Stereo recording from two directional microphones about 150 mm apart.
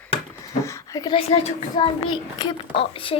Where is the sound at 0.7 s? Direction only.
20° left (ahead or behind).